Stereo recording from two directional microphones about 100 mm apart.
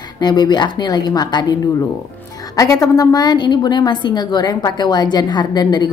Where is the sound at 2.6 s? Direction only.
35° left (ahead or behind).